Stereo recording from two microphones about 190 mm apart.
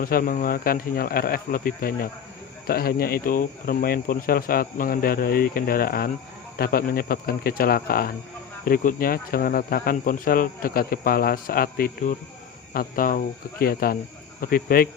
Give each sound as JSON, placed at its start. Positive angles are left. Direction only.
{"t": 0.0, "sound": "speech", "side_deg": 50}